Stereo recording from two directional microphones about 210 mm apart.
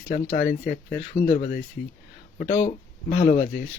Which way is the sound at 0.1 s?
35° left (ahead or behind).